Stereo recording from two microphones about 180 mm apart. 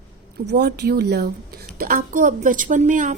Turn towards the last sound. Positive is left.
turn(degrees=-45)  # may be behind; listen again after turning